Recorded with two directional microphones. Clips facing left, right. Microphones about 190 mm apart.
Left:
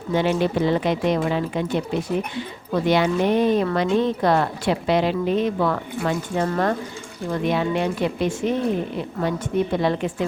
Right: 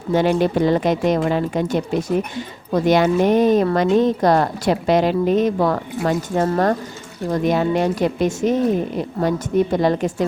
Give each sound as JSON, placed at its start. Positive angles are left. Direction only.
{"t": 0.1, "sound": "speech", "side_deg": -45}
{"t": 9.7, "sound": "a woman's voice", "side_deg": -40}